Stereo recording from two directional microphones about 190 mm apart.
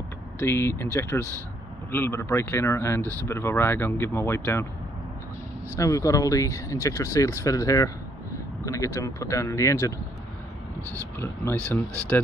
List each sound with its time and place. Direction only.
0.4 s speech: 15° left (ahead or behind)
1.9 s speech: 10° left (ahead or behind)
3.0 s speech: 15° right (ahead or behind)
3.3 s speech: 10° left (ahead or behind)
5.8 s speech: 15° left (ahead or behind)
11.1 s speech: 10° left (ahead or behind)